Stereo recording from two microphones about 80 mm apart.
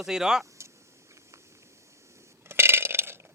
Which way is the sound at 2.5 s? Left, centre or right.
Right.